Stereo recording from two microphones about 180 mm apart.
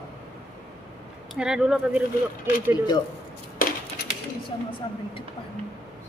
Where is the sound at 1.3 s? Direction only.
5° right (ahead or behind).